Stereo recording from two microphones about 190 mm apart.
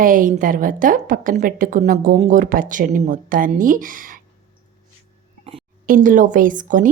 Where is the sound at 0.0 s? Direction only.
45° right (ahead or behind).